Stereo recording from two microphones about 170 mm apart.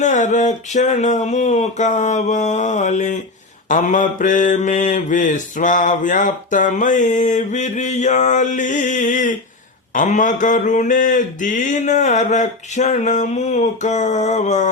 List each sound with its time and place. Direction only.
0.0 s mantra: 45° left (ahead or behind)